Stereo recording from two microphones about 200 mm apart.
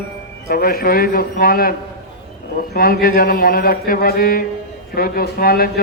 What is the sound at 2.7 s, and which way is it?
A man's voice, 50° left (ahead or behind).